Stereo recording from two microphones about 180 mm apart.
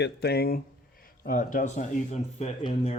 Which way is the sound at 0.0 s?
65° left (ahead or behind).